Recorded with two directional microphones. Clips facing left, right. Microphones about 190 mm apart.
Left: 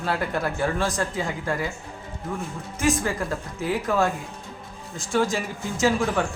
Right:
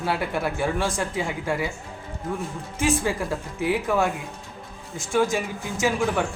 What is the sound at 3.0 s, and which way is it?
Speech, 15° right (ahead or behind).